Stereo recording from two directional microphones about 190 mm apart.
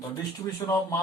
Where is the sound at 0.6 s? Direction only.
15° left (ahead or behind).